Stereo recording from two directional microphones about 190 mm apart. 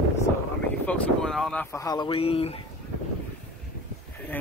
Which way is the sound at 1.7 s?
20° left (ahead or behind).